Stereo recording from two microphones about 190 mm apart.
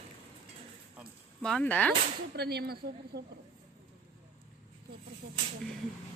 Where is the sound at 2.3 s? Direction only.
60° right (ahead or behind).